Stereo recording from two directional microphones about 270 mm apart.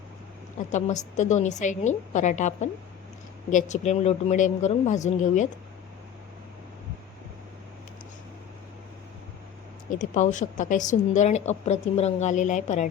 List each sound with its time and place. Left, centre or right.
0.7 s a woman's voice: left
9.9 s a woman's voice: left